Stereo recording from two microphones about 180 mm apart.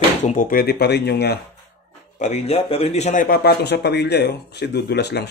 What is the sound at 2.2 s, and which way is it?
A man's voice, 35° left (ahead or behind).